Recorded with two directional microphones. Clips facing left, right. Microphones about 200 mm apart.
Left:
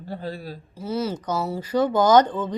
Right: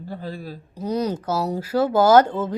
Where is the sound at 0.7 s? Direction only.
15° right (ahead or behind).